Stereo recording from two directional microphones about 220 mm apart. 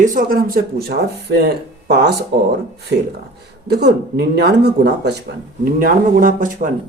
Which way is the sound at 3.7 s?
50° right (ahead or behind).